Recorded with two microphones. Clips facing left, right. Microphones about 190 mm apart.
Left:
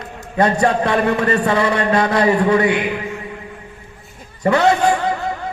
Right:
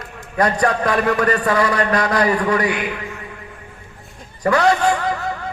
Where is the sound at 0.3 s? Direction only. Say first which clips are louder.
Left 2 dB; 25° left (ahead or behind).